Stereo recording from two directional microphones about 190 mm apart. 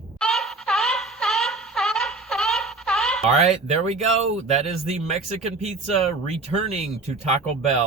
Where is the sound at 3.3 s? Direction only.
35° right (ahead or behind).